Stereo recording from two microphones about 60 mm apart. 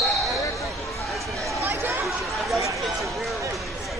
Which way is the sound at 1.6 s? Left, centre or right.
Right.